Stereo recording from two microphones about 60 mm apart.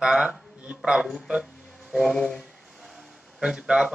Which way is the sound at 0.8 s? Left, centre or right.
Centre.